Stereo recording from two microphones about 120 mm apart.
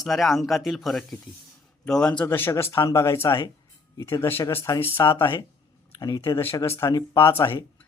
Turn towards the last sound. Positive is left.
turn(degrees=20)  # may be behind; listen again after turning